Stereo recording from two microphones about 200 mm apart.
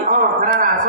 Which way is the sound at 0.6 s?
45° right (ahead or behind).